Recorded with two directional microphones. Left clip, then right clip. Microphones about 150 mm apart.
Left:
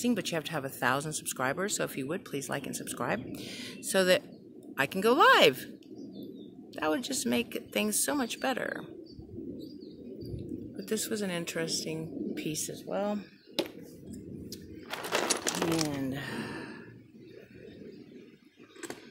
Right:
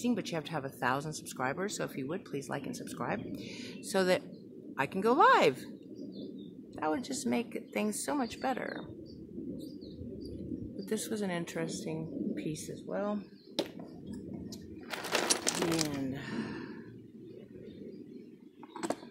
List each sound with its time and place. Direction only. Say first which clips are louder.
0.0 s speech: left 3 dB; 15° left (ahead or behind)
6.7 s speech: left 3 dB; 15° left (ahead or behind)
10.9 s speech: left 2 dB; 5° left (ahead or behind)
13.6 s a sound: left 2 dB; 40° left (ahead or behind)
14.5 s sewing machine: left 3 dB; 60° left (ahead or behind)
16.2 s sigh: left 2 dB; 35° left (ahead or behind)